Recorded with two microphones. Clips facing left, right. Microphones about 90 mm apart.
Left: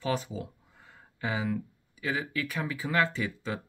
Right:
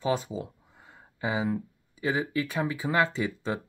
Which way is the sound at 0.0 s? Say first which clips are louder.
Right 3 dB; 20° right (ahead or behind).